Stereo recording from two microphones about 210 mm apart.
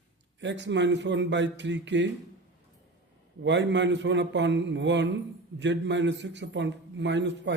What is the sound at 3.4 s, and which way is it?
A man's voice, 60° right (ahead or behind).